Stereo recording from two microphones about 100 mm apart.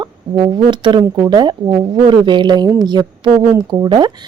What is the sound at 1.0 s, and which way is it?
Speech, 45° right (ahead or behind).